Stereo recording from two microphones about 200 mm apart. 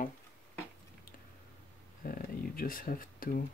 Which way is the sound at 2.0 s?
45° left (ahead or behind).